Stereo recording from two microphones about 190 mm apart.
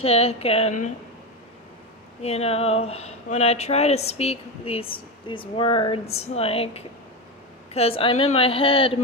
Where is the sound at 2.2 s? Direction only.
35° left (ahead or behind).